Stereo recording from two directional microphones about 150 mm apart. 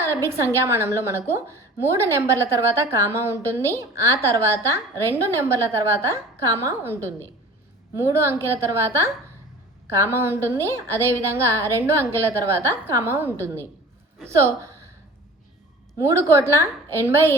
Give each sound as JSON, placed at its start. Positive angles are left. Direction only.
{"t": 0.0, "sound": "a woman's voice", "side_deg": -20}
{"t": 16.0, "sound": "a woman's voice", "side_deg": -20}